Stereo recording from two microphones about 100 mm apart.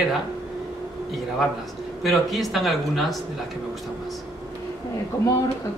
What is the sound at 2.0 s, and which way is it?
Speech, centre (ahead or behind).